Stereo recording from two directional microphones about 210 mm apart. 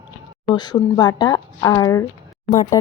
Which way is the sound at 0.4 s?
20° left (ahead or behind).